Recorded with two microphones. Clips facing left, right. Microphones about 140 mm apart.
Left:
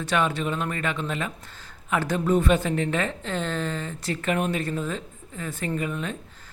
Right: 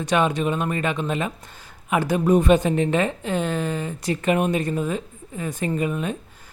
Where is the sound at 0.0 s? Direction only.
15° right (ahead or behind).